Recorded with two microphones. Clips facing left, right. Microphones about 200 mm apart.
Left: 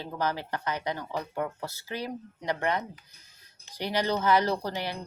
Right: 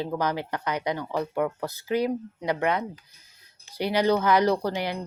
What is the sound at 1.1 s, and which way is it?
Speech, 55° right (ahead or behind).